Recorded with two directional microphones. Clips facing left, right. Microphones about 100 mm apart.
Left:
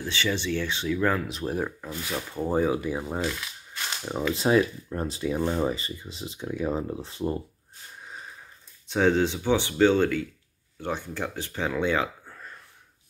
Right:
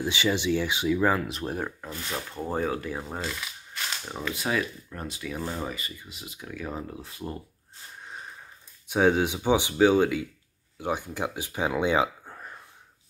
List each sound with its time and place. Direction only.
0.0 s speech: 15° right (ahead or behind); by 3.2 s 10° left (ahead or behind)
4.3 s speech: 30° left (ahead or behind)
8.8 s speech: 10° right (ahead or behind)